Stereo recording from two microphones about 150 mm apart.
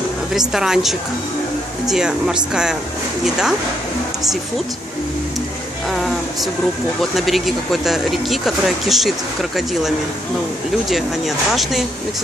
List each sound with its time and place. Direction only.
0.3 s speech: 5° right (ahead or behind)
7.0 s speech: centre (ahead or behind)